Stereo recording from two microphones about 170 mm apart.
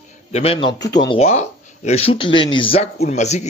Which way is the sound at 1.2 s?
40° left (ahead or behind).